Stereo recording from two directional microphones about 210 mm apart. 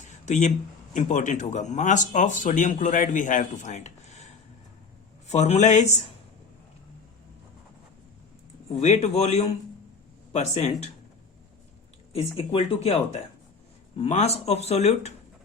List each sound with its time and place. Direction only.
0.0 s a sound: 35° left (ahead or behind)
0.9 s speech: 35° left (ahead or behind)
5.3 s speech: 30° left (ahead or behind)
8.8 s speech: 30° left (ahead or behind)
12.1 s speech: 25° left (ahead or behind)